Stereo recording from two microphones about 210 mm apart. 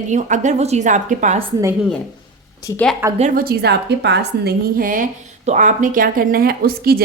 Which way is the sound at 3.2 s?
40° right (ahead or behind).